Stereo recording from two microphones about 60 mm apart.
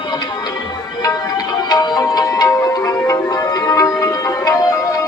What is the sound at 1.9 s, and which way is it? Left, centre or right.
Music, left.